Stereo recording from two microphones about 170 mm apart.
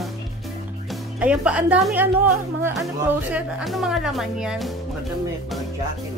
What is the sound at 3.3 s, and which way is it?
Speech, centre (ahead or behind).